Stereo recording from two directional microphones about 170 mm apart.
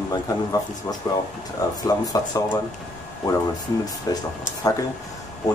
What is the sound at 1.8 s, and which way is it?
Speech, 20° left (ahead or behind).